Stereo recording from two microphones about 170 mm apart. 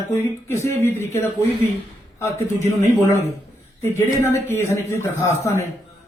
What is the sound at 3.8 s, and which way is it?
Speech, 15° left (ahead or behind).